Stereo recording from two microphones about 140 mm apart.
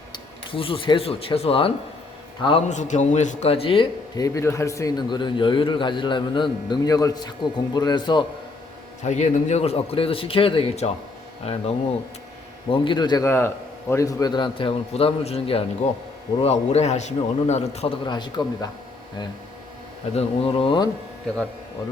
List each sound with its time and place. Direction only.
0.1 s speech: 40° left (ahead or behind)
2.6 s a man's voice: 60° left (ahead or behind); by 3.8 s 40° left (ahead or behind)
4.1 s a man's voice: 25° left (ahead or behind)
9.0 s a man's voice: 55° left (ahead or behind)
12.7 s a man's voice: 35° left (ahead or behind)
13.2 s a man's voice: 15° left (ahead or behind); by 15.6 s 45° left (ahead or behind)
15.8 s a man's voice: 55° left (ahead or behind)
18.0 s a man's voice: 30° left (ahead or behind)
20.1 s a man's voice: 45° left (ahead or behind)